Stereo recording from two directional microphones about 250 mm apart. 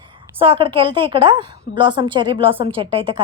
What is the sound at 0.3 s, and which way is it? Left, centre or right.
A woman's voice, right.